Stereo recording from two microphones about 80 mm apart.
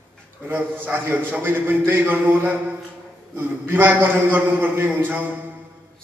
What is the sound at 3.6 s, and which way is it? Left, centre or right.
A man's voice, right.